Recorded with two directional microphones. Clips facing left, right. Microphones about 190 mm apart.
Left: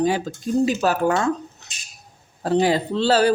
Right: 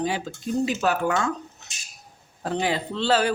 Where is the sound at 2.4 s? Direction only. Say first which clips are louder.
Left 7 dB; 35° left (ahead or behind).